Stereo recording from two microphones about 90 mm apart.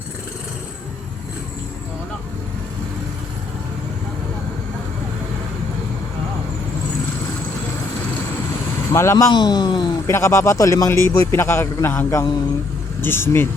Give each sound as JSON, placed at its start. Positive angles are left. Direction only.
{"t": 8.9, "sound": "speech", "side_deg": 30}
{"t": 9.3, "sound": "speech", "side_deg": 55}
{"t": 10.1, "sound": "a man's voice", "side_deg": 30}